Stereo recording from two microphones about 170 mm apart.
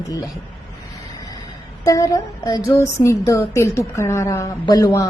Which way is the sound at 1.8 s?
20° left (ahead or behind).